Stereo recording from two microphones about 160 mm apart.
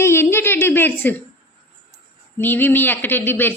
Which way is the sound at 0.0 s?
15° left (ahead or behind).